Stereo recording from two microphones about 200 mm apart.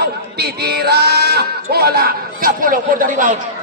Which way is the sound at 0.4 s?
55° right (ahead or behind).